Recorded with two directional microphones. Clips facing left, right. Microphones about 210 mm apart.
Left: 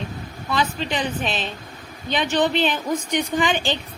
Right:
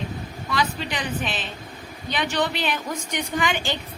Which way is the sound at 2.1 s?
25° left (ahead or behind).